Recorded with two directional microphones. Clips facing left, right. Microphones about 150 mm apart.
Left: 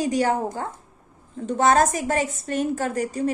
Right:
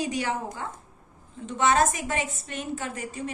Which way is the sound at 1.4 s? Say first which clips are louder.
Left 4 dB; 40° left (ahead or behind).